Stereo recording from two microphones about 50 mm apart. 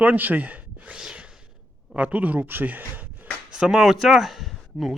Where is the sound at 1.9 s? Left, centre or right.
Right.